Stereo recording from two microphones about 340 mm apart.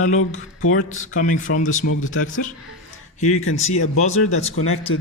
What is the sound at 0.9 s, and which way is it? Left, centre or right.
Speech, left.